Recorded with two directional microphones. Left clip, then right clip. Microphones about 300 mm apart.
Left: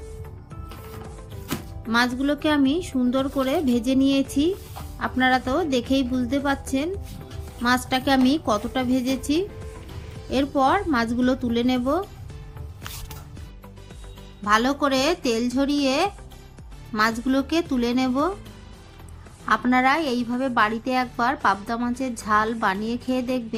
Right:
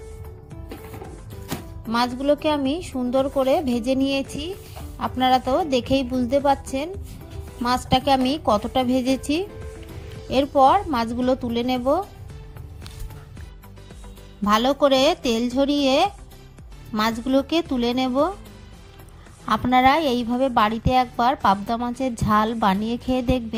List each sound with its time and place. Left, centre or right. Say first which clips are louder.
1.9 s a woman's voice: right 1 dB; right
14.4 s a woman's voice: right 2 dB; right
19.5 s a woman's voice: right 2 dB; right